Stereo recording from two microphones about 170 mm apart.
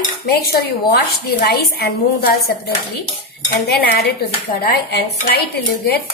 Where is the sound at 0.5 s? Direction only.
75° left (ahead or behind).